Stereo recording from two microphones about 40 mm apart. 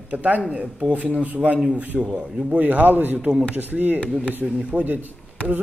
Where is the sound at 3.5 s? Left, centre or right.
Right.